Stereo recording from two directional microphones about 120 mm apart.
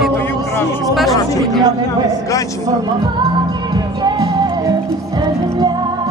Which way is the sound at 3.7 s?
35° right (ahead or behind).